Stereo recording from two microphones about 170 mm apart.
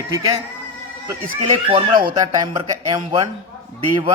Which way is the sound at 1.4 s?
25° right (ahead or behind).